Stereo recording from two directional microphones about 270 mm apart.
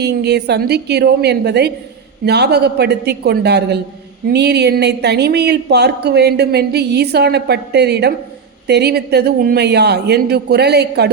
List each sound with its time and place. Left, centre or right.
0.0 s speech: right